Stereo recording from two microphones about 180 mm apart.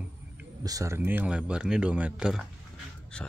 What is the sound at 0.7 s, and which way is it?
Speech, 20° right (ahead or behind).